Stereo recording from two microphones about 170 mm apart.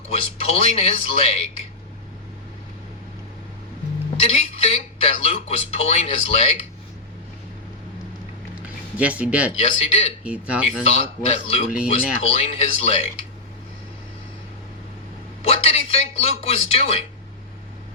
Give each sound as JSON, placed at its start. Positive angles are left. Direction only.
{"t": 0.1, "sound": "speech", "side_deg": 35}
{"t": 4.3, "sound": "speech", "side_deg": 35}
{"t": 9.0, "sound": "speech", "side_deg": -10}
{"t": 9.6, "sound": "speech", "side_deg": 35}
{"t": 10.2, "sound": "speech", "side_deg": -5}
{"t": 10.8, "sound": "speech", "side_deg": 35}
{"t": 15.4, "sound": "speech", "side_deg": 35}